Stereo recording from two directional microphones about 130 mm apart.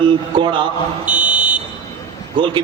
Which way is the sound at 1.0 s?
10° right (ahead or behind).